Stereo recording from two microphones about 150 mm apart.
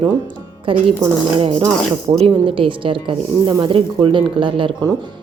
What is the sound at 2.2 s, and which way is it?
Speech, 35° right (ahead or behind).